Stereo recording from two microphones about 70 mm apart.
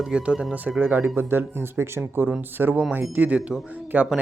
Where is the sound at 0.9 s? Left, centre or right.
Right.